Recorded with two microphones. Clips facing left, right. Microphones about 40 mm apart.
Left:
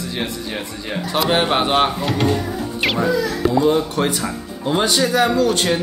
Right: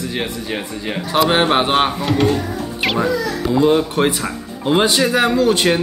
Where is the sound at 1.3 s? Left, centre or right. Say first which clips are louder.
Even; right.